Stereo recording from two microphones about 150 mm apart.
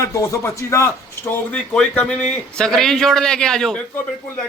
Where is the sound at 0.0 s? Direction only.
20° left (ahead or behind).